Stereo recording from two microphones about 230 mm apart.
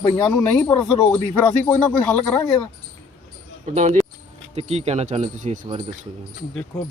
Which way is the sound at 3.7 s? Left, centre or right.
Right.